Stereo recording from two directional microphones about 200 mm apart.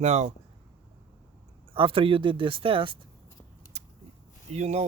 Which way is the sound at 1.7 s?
25° right (ahead or behind).